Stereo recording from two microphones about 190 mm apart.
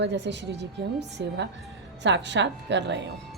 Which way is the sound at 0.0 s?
65° right (ahead or behind).